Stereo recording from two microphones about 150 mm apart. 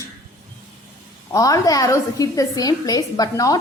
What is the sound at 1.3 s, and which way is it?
A woman's voice, 25° left (ahead or behind).